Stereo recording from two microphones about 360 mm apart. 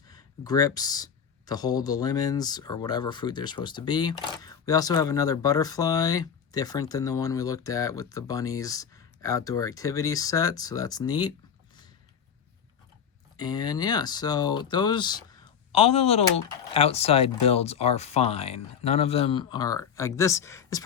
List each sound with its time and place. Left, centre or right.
0.1 s speech: centre
13.3 s speech: centre